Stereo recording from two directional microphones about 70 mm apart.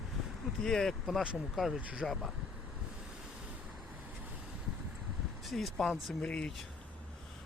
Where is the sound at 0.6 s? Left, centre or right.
Centre.